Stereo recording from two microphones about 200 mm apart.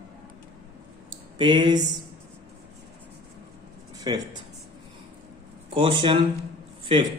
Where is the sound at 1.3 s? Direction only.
25° right (ahead or behind).